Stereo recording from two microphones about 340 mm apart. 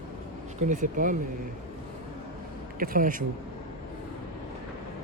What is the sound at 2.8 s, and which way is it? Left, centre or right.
Speech, right.